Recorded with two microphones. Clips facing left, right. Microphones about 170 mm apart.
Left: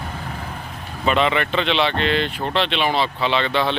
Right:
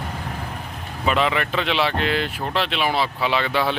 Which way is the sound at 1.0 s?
5° right (ahead or behind).